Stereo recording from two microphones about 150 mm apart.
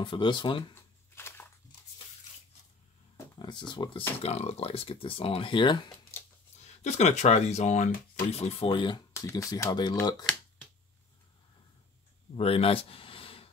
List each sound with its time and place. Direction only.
0.0 s speech: 30° left (ahead or behind)
1.1 s a sound: 15° left (ahead or behind)
3.3 s speech: 30° left (ahead or behind)
4.2 s speech: 45° left (ahead or behind)
6.8 s speech: 50° left (ahead or behind); by 9.0 s 35° left (ahead or behind)
9.1 s speech: 20° left (ahead or behind)
12.4 s speech: 40° left (ahead or behind)